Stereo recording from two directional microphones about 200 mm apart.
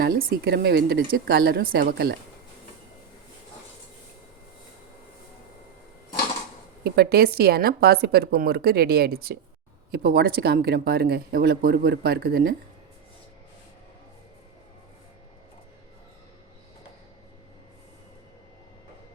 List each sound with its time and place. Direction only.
0.0 s speech: 50° right (ahead or behind)
6.8 s speech: 50° right (ahead or behind)